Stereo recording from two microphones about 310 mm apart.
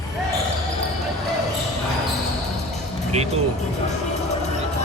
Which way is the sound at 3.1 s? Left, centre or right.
Right.